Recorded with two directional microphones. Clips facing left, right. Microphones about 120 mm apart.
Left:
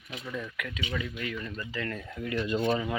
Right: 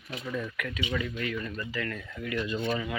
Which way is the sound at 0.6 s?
15° left (ahead or behind).